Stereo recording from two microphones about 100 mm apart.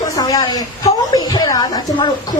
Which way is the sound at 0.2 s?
40° left (ahead or behind).